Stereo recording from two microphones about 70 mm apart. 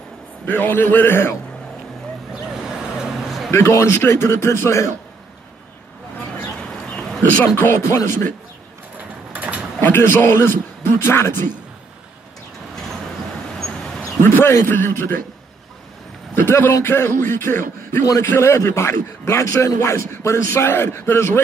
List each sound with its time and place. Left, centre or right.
0.5 s a man's voice: left
3.0 s a sound: centre
3.5 s a man's voice: left
7.5 s a man's voice: left
8.9 s a sound: right
9.8 s a man's voice: left
13.6 s a sound: centre
14.2 s a man's voice: left
16.4 s a man's voice: left